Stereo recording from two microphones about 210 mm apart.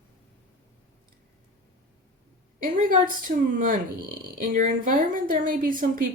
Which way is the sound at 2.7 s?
40° right (ahead or behind).